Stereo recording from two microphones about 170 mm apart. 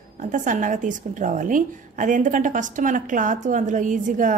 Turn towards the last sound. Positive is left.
turn(degrees=-50)  # may be behind; listen again after turning